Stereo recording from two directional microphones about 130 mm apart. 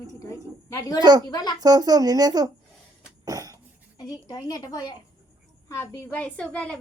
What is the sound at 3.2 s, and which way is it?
Cough, 25° right (ahead or behind).